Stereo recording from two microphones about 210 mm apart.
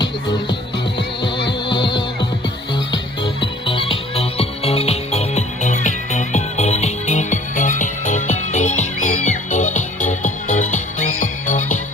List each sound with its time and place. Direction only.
3.4 s music: 25° left (ahead or behind)